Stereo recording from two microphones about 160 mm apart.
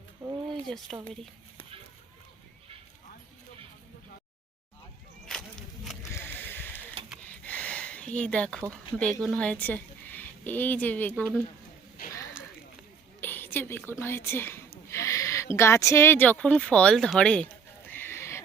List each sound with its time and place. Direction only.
0.9 s speech: centre (ahead or behind)
6.0 s a sound: 15° left (ahead or behind)
8.7 s speech: 5° left (ahead or behind)
13.2 s a woman's voice: 10° left (ahead or behind)
14.8 s owl: 15° left (ahead or behind)
15.5 s speech: 15° left (ahead or behind)